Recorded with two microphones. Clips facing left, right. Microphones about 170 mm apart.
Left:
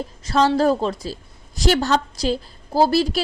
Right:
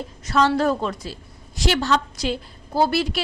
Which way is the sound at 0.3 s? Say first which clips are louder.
Left 2 dB; 35° left (ahead or behind).